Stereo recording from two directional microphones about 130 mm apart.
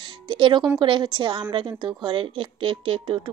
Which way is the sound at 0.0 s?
40° right (ahead or behind).